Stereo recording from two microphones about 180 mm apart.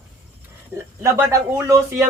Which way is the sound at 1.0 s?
15° right (ahead or behind).